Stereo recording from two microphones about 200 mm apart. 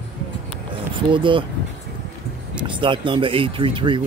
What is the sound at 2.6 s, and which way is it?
Speech, 25° right (ahead or behind).